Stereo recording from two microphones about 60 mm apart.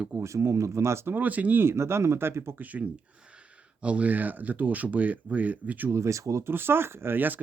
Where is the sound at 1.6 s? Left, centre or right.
Right.